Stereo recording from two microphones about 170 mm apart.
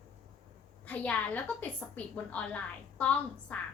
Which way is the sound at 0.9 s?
10° left (ahead or behind).